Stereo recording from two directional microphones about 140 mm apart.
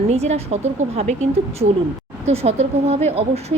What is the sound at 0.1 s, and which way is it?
A woman's voice, 50° right (ahead or behind).